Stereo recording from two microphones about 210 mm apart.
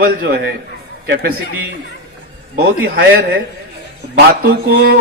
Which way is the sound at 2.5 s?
50° right (ahead or behind).